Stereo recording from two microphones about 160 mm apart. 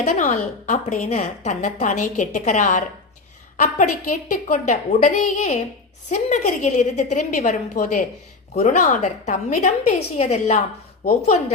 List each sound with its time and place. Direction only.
0.0 s a woman's voice: 50° left (ahead or behind)